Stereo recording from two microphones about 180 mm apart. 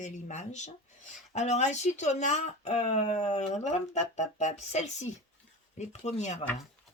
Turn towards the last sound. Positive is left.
turn(degrees=40)  # may be behind; listen again after turning